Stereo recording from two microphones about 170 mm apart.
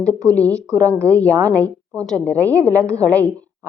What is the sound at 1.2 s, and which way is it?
Speech, 15° right (ahead or behind).